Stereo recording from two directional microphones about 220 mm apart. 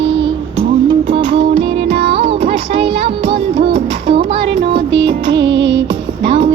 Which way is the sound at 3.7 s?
25° right (ahead or behind).